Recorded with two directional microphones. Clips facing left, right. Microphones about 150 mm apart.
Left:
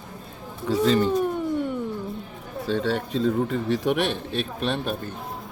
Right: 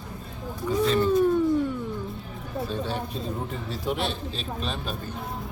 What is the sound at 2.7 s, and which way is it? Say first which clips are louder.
Speech: left 9 dB; 85° left.